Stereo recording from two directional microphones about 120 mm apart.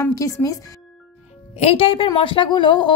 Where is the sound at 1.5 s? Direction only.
55° left (ahead or behind); by 2.9 s 40° left (ahead or behind).